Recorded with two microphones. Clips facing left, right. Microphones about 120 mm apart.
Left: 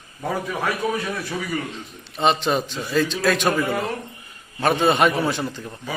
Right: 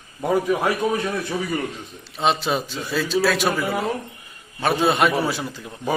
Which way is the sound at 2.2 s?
5° right (ahead or behind).